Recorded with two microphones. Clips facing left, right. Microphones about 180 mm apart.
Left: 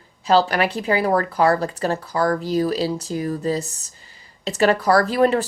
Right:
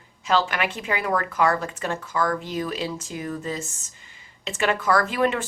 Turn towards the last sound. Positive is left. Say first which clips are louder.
# left 5 dB
turn(degrees=35)  # may be behind; listen again after turning